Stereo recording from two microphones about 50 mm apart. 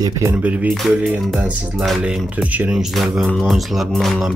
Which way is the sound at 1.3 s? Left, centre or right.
Centre.